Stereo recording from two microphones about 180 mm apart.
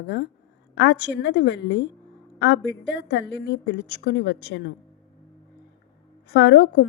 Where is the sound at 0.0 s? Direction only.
75° left (ahead or behind).